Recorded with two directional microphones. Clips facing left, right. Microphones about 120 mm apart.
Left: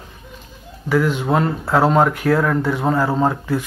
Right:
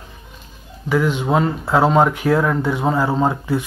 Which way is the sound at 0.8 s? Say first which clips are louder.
Even; centre (ahead or behind).